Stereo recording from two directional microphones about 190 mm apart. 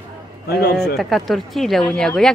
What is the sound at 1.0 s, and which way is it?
Speech, centre (ahead or behind).